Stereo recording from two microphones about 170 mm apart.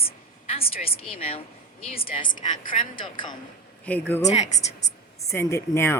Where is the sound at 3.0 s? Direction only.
25° left (ahead or behind).